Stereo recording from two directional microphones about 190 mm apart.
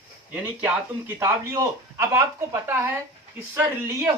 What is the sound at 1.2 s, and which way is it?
Speech, 15° right (ahead or behind).